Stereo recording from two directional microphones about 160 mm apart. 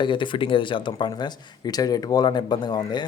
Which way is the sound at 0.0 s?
30° left (ahead or behind).